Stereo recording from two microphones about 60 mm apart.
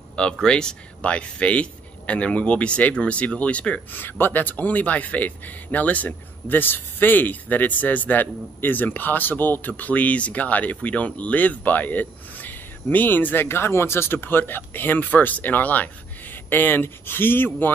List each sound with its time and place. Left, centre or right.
0.1 s speech: centre
3.9 s speech: left